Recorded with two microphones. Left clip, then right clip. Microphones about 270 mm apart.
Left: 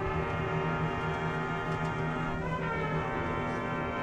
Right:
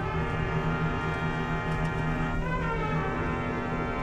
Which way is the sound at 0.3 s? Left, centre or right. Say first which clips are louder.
Right 1 dB; left.